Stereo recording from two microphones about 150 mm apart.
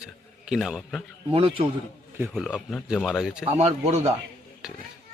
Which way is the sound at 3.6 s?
45° right (ahead or behind).